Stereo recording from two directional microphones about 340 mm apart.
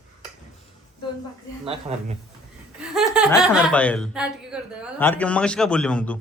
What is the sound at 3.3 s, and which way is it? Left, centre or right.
Speech, centre.